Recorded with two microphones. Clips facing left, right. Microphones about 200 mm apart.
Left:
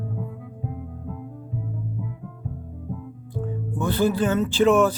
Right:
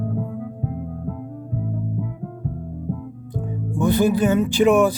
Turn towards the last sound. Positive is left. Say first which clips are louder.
# right 2 dB
turn(degrees=-15)  # may be behind; listen again after turning